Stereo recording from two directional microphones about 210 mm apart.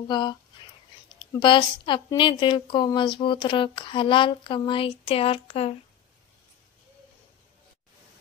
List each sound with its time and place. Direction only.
0.1 s a woman's voice: 20° left (ahead or behind)
1.4 s a woman's voice: 20° left (ahead or behind)